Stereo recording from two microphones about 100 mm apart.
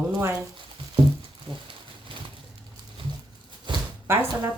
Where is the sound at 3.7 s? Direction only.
55° right (ahead or behind).